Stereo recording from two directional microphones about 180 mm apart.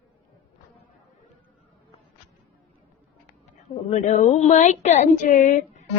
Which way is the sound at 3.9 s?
45° left (ahead or behind).